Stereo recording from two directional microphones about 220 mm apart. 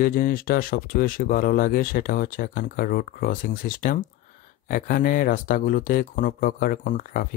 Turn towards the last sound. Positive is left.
turn(degrees=40)  # may be behind; listen again after turning